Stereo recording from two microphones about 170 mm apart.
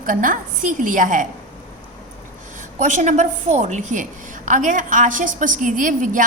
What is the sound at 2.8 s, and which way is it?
A woman's voice, 45° right (ahead or behind).